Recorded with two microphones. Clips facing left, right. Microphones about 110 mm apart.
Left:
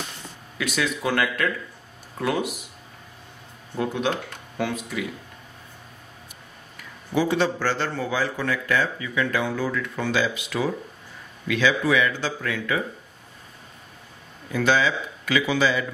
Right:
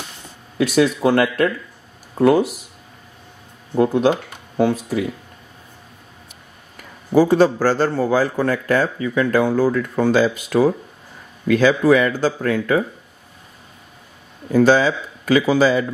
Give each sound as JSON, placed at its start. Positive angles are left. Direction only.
{"t": 0.6, "sound": "a man's voice", "side_deg": -35}
{"t": 3.7, "sound": "a man's voice", "side_deg": -35}
{"t": 6.8, "sound": "a man's voice", "side_deg": -45}
{"t": 14.5, "sound": "a man's voice", "side_deg": -40}